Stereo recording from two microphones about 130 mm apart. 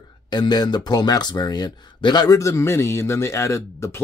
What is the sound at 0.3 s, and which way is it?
Speech, 30° left (ahead or behind).